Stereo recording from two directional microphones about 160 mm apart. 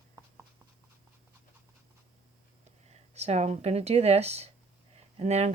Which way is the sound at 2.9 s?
45° right (ahead or behind).